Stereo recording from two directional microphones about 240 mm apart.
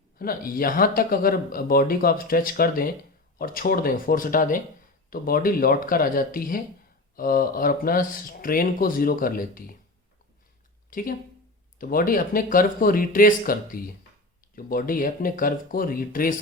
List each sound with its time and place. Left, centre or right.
0.2 s speech: left
10.9 s speech: left